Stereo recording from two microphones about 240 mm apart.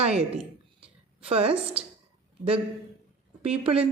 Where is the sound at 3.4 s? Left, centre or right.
Right.